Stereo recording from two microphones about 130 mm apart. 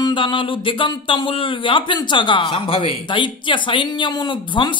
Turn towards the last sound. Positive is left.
turn(degrees=35)  # may be behind; listen again after turning